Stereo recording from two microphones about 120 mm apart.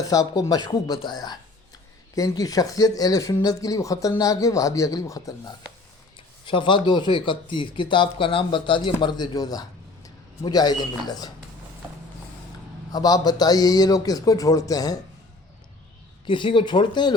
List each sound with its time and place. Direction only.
0.0 s speech: 30° left (ahead or behind)
6.4 s speech: 45° left (ahead or behind)
12.9 s speech: 35° left (ahead or behind)
16.2 s speech: 40° left (ahead or behind)